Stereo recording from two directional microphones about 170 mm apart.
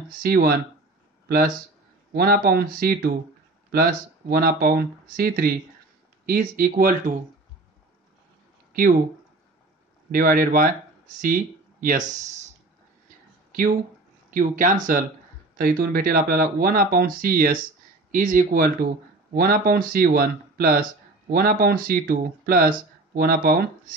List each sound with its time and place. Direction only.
0.2 s speech: 60° right (ahead or behind)
2.1 s speech: 65° right (ahead or behind)
10.1 s speech: 55° right (ahead or behind)
13.5 s a sound: 55° right (ahead or behind)
14.3 s speech: 55° right (ahead or behind)